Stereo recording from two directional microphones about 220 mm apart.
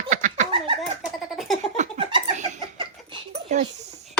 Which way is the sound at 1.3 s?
Centre (ahead or behind).